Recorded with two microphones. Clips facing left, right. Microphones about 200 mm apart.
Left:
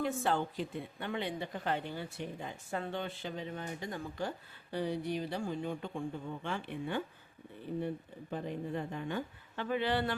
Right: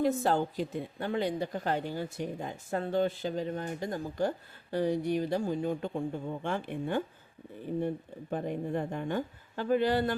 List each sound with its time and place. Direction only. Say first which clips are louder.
0.0 s speech: right 5 dB; 40° right (ahead or behind)
8.3 s speech: right 5 dB; 50° right (ahead or behind)